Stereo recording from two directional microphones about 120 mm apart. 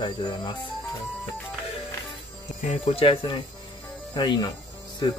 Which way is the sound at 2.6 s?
50° left (ahead or behind).